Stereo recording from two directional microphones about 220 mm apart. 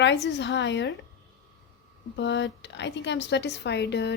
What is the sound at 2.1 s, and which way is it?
A woman's voice, 55° left (ahead or behind).